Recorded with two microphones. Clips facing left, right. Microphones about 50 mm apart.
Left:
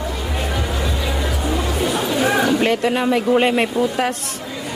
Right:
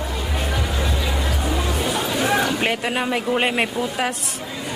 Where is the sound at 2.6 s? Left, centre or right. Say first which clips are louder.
Left 4 dB; centre.